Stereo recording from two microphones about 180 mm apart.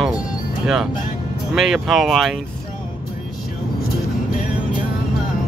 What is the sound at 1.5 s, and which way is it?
Speech, centre (ahead or behind).